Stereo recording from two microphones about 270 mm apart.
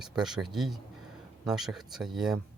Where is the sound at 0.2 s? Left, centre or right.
Centre.